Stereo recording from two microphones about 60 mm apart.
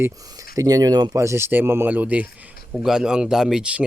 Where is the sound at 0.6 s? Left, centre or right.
Right.